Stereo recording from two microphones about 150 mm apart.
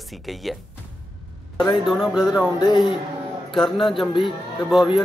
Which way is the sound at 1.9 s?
Centre (ahead or behind).